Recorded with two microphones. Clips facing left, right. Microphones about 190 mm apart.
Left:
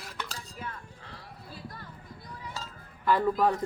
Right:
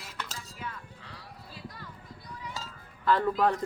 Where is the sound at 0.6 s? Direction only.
45° left (ahead or behind).